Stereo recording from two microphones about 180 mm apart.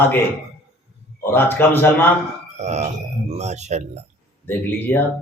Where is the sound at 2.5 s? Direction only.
40° right (ahead or behind).